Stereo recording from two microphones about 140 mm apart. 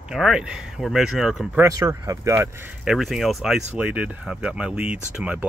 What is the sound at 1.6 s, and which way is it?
Speech, 25° right (ahead or behind).